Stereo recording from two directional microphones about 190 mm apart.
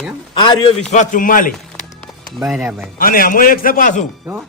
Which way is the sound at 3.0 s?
50° left (ahead or behind).